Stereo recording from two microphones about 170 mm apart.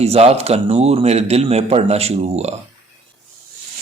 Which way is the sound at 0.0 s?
40° right (ahead or behind).